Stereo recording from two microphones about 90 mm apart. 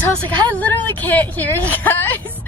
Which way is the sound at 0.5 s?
20° left (ahead or behind).